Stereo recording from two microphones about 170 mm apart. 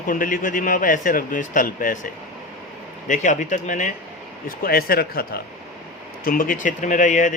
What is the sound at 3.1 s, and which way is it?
Speech, 50° left (ahead or behind).